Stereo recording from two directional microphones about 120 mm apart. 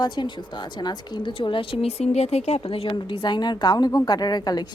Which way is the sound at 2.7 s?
50° left (ahead or behind).